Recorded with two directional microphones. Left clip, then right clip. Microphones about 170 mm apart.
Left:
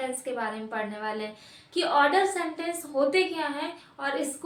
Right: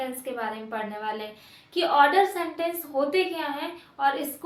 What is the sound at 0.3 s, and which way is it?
A woman's voice, 15° right (ahead or behind).